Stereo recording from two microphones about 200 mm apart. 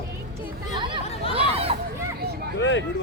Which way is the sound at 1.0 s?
30° left (ahead or behind).